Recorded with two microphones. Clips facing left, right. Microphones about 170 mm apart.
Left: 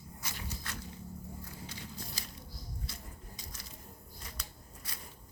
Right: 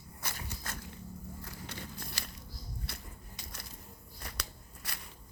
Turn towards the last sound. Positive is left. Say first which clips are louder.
# right 1 dB
turn(degrees=-70)  # may be behind; listen again after turning